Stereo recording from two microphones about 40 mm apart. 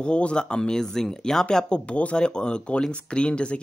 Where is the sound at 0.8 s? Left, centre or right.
Centre.